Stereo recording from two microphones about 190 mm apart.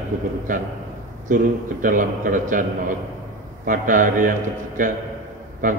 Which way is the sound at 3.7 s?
45° right (ahead or behind).